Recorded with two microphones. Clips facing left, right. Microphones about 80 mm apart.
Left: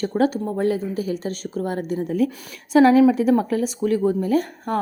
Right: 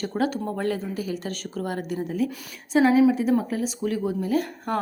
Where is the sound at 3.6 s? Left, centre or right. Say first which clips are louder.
Left 6 dB; left.